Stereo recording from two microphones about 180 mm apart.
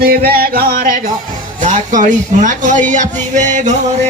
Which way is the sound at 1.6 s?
45° right (ahead or behind).